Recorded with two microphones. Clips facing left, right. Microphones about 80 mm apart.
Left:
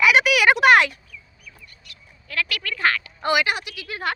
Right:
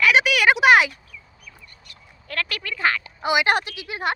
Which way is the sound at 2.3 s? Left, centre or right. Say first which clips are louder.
Left 1 dB; right.